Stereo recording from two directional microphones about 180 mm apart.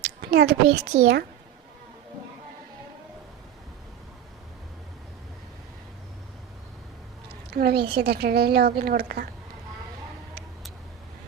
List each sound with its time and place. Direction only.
0.2 s a woman's voice: 65° right (ahead or behind)
7.5 s a woman's voice: 60° right (ahead or behind)